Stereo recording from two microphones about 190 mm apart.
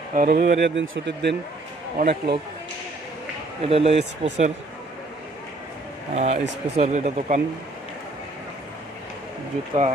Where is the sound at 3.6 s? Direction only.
30° right (ahead or behind).